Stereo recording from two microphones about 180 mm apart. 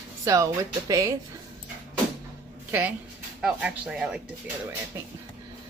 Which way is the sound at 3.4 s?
5° right (ahead or behind).